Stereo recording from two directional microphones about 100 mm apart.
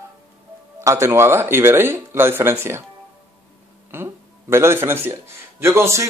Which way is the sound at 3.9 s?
25° right (ahead or behind).